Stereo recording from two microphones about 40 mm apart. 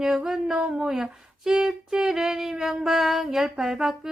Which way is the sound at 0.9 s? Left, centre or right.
Centre.